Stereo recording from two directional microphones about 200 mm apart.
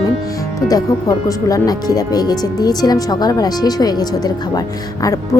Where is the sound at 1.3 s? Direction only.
15° left (ahead or behind).